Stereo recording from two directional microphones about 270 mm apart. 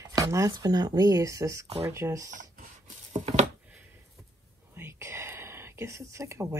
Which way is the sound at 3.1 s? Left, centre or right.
Right.